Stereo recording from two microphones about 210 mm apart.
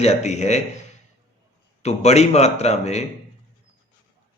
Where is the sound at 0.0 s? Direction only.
35° left (ahead or behind).